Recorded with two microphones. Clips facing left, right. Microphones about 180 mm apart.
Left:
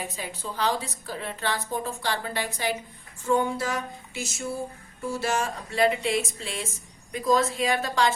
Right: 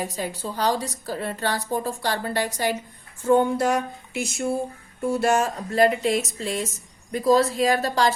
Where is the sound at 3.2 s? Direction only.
55° right (ahead or behind).